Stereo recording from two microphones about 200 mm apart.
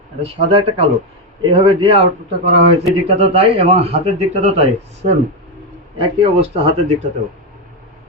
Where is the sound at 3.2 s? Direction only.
30° right (ahead or behind).